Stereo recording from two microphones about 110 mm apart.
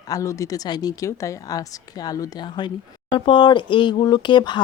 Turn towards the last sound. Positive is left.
turn(degrees=45)  # may be behind; listen again after turning